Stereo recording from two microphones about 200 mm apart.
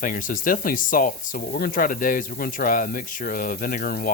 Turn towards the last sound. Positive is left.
turn(degrees=45)  # may be behind; listen again after turning